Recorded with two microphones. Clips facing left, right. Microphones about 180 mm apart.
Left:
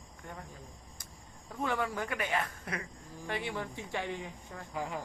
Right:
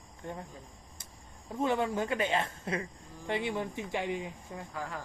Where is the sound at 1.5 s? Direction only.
25° right (ahead or behind).